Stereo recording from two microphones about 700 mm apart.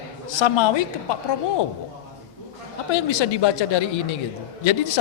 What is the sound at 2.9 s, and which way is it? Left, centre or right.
A man's voice, left.